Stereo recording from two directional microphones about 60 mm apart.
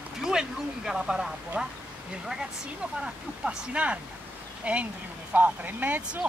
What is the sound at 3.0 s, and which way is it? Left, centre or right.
Speech, centre.